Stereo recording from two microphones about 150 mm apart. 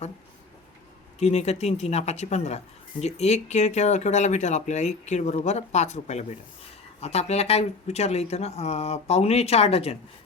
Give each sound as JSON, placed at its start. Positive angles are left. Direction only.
{"t": 1.2, "sound": "speech", "side_deg": 45}